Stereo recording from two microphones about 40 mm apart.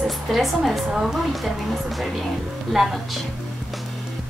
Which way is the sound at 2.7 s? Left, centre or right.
Centre.